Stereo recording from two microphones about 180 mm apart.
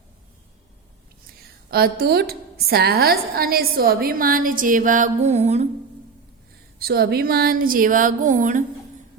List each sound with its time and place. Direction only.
1.7 s a woman's voice: 60° right (ahead or behind); by 5.6 s 40° right (ahead or behind)
6.7 s speech: 60° right (ahead or behind)